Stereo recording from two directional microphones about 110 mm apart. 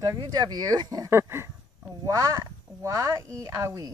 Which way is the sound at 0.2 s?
40° right (ahead or behind).